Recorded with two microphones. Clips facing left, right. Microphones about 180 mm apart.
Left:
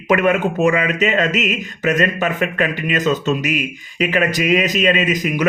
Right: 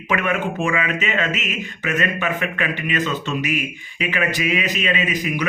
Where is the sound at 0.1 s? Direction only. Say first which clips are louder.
Left 6 dB; 40° left (ahead or behind).